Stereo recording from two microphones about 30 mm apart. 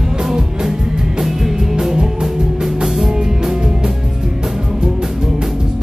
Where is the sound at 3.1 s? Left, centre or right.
Right.